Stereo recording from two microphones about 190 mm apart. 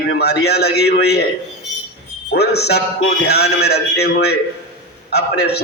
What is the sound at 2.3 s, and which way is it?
A man's voice, 60° left (ahead or behind).